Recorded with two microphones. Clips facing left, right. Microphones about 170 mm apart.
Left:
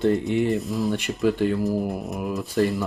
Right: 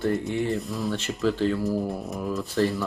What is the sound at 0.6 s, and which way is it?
Speech, centre (ahead or behind).